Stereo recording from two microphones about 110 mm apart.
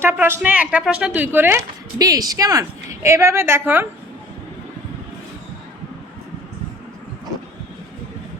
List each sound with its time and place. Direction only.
0.0 s a woman's voice: 20° right (ahead or behind)
2.0 s a woman's voice: 35° right (ahead or behind)